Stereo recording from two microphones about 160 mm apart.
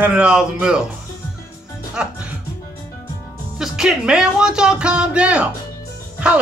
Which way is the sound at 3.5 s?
5° right (ahead or behind).